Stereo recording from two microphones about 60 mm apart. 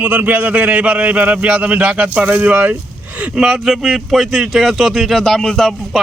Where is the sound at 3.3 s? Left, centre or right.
Centre.